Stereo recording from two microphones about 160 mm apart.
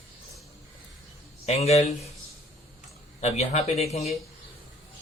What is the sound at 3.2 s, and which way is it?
Speech, 45° left (ahead or behind).